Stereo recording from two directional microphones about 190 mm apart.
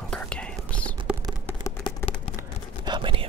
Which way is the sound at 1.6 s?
15° left (ahead or behind).